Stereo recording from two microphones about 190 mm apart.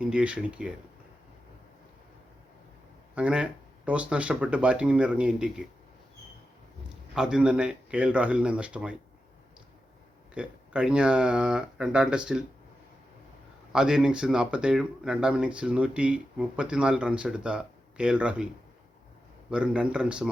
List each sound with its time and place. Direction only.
0.0 s speech: 5° right (ahead or behind)
3.2 s speech: 5° right (ahead or behind)
7.2 s speech: 5° right (ahead or behind)
10.3 s speech: 5° right (ahead or behind)
13.7 s speech: 5° right (ahead or behind)
19.5 s speech: 5° right (ahead or behind)